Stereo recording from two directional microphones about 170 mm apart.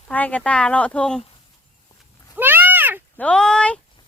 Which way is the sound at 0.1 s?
10° left (ahead or behind).